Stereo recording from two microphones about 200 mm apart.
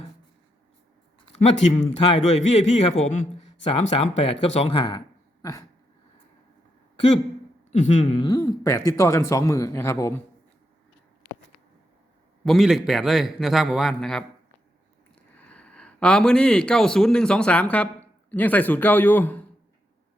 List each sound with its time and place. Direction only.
1.4 s a man's voice: 35° left (ahead or behind); by 5.6 s 15° left (ahead or behind)
7.7 s speech: 35° left (ahead or behind); by 10.2 s 15° left (ahead or behind)
12.5 s a man's voice: centre (ahead or behind)
15.4 s a man's voice: 5° left (ahead or behind)